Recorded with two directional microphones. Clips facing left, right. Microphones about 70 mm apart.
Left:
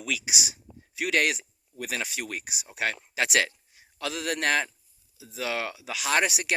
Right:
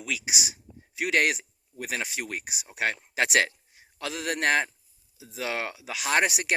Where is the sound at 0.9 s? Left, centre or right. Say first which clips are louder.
Right 1 dB; right.